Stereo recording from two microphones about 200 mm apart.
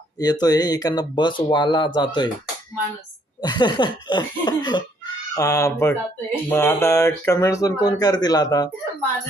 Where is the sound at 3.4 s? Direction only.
20° left (ahead or behind).